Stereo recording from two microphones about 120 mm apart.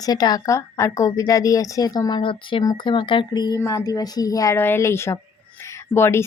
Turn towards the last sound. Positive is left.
turn(degrees=20)  # may be behind; listen again after turning